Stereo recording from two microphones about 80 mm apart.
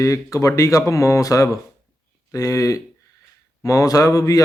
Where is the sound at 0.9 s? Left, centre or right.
Left.